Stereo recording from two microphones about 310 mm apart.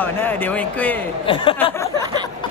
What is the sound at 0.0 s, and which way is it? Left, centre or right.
Speech, centre.